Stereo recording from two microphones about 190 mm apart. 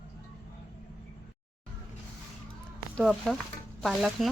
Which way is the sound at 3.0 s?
5° left (ahead or behind).